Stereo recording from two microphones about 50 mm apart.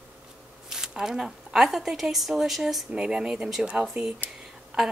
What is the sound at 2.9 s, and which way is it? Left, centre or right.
Speech, centre.